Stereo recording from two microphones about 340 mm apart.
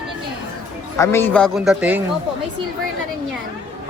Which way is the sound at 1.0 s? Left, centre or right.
Centre.